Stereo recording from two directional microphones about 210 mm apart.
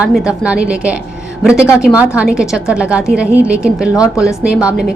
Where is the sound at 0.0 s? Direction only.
5° right (ahead or behind).